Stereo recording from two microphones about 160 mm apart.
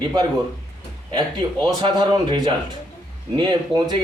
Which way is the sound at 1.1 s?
30° right (ahead or behind).